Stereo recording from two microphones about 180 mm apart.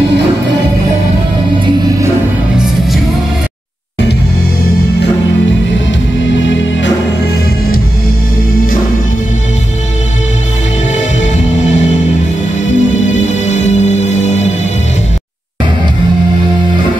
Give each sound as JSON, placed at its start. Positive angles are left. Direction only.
{"t": 6.4, "sound": "music", "side_deg": 90}
{"t": 12.7, "sound": "music", "side_deg": 40}